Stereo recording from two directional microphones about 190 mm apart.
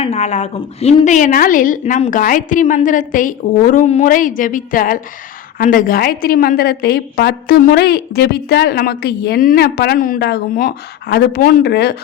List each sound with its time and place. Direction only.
0.0 s a woman's voice: 35° left (ahead or behind); by 11.9 s 55° left (ahead or behind)